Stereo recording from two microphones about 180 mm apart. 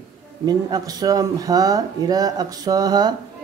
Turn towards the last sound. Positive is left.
turn(degrees=-25)  # may be behind; listen again after turning